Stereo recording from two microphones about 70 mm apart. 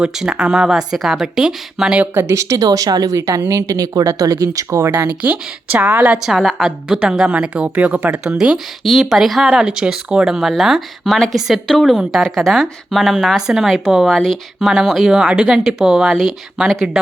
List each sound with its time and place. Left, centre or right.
0.0 s speech: centre
2.1 s speech: right
2.6 s speech: right
5.0 s a woman's voice: right
6.2 s speech: centre
6.7 s speech: centre
8.4 s speech: centre